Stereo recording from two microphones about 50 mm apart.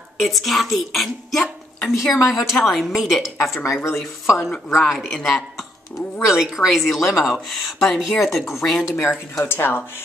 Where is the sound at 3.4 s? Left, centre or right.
Left.